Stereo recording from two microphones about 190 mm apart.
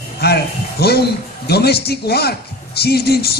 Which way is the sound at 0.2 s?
55° left (ahead or behind).